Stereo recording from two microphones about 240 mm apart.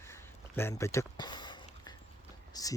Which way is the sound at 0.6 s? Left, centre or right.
Centre.